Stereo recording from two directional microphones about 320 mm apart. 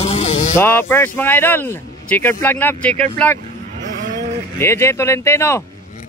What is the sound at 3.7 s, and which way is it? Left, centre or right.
Cattle, right.